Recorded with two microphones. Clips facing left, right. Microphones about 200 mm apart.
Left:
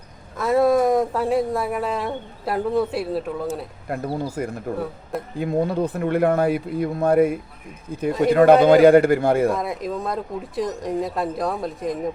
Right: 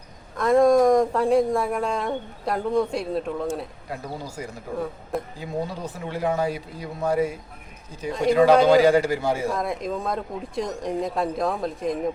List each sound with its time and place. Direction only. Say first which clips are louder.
0.3 s speech: right 1 dB; 5° left (ahead or behind)
3.8 s speech: left 7 dB; 55° left (ahead or behind)
9.5 s speech: left 2 dB; centre (ahead or behind)